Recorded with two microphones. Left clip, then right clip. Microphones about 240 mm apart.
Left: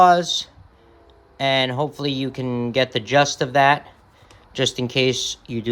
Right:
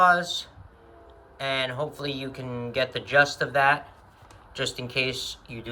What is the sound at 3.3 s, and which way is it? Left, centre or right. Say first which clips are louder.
Speech: left 5 dB; left.